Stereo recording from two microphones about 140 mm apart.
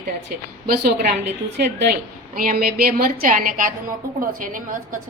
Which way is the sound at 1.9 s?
85° right.